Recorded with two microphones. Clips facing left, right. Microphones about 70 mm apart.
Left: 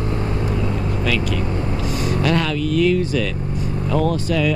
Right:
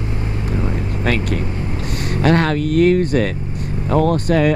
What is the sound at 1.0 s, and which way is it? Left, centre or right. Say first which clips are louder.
Vehicle: right 3 dB; right.